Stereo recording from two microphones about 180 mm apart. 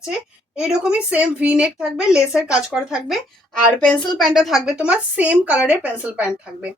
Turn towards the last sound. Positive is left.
turn(degrees=-5)  # may be behind; listen again after turning